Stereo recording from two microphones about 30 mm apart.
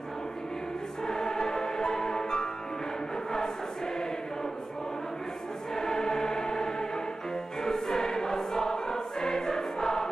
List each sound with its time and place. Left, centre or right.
1.0 s music: left
3.3 s choir: centre
5.8 s music: left
7.6 s choir: centre